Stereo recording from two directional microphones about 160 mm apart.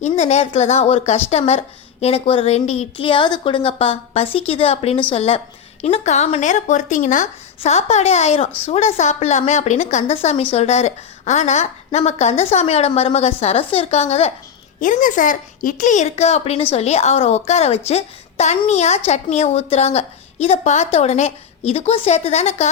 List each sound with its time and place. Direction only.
0.0 s a woman's voice: 45° left (ahead or behind)
14.8 s a woman's voice: 55° left (ahead or behind)